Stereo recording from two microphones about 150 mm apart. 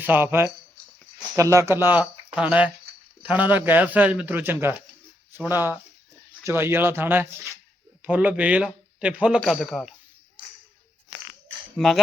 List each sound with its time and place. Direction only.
0.0 s a man's voice: 15° right (ahead or behind)